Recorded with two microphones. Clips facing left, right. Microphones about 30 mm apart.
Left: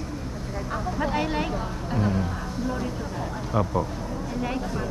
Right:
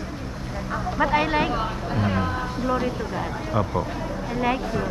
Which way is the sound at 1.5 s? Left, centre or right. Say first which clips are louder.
Right 4 dB; right.